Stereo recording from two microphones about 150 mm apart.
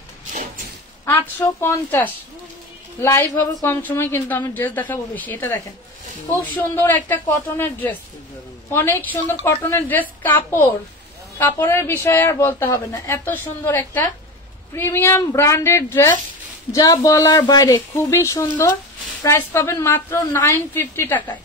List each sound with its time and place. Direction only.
1.6 s speech: 15° left (ahead or behind)